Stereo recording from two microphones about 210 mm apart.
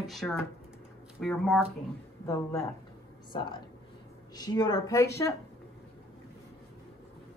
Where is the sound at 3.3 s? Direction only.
20° left (ahead or behind).